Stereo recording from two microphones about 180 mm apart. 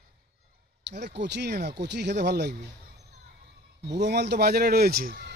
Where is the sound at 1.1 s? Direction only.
70° right (ahead or behind).